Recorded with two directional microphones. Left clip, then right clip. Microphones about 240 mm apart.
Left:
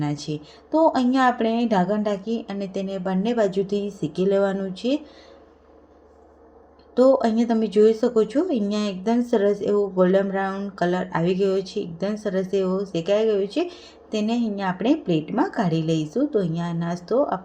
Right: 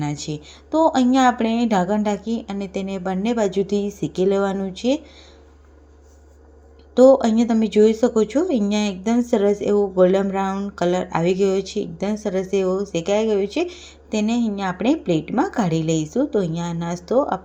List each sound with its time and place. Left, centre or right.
0.1 s speech: centre
6.9 s speech: centre